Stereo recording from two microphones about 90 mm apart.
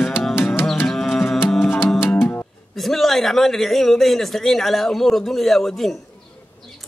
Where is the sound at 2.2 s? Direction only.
20° left (ahead or behind).